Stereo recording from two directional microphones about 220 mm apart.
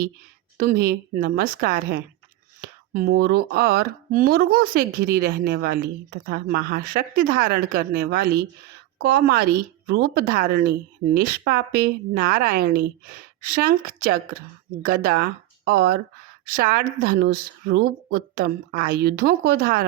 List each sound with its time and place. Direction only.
0.5 s a woman's voice: 40° right (ahead or behind)